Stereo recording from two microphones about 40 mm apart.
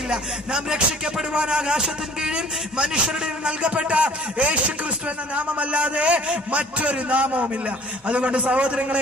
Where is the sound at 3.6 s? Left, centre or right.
Right.